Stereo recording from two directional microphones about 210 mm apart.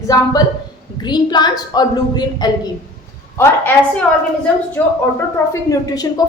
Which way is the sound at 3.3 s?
10° left (ahead or behind).